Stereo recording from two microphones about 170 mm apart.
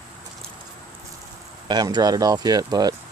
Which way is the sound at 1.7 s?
25° right (ahead or behind).